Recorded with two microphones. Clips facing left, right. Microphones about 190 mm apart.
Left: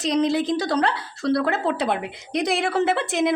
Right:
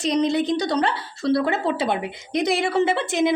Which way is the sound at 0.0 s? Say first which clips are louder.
Even; centre (ahead or behind).